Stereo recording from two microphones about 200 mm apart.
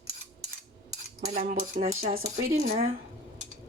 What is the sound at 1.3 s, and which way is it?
Speech, 45° right (ahead or behind).